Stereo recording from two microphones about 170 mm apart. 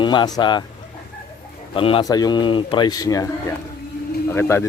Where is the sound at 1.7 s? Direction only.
30° left (ahead or behind).